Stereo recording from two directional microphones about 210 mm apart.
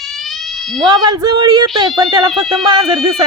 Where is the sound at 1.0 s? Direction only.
20° right (ahead or behind).